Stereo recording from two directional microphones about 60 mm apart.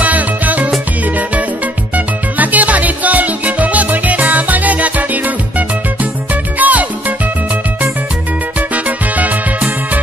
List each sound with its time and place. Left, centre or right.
0.0 s music: right
2.0 s music: right
6.6 s music: right
8.5 s music: right